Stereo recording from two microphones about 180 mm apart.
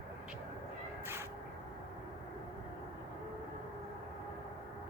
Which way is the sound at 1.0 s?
10° right (ahead or behind).